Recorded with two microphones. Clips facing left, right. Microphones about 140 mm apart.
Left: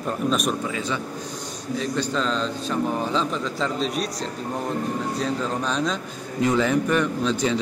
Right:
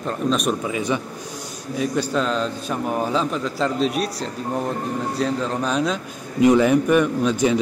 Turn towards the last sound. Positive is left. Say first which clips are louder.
# right 4 dB
turn(degrees=-10)  # may be behind; listen again after turning